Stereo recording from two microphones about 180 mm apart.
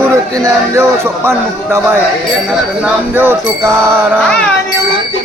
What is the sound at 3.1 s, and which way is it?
Music, 10° right (ahead or behind).